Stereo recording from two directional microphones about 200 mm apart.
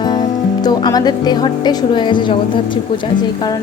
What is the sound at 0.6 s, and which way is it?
A woman's voice, 20° left (ahead or behind).